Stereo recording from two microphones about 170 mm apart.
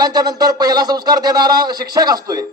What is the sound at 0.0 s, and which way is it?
A man's voice, 25° right (ahead or behind).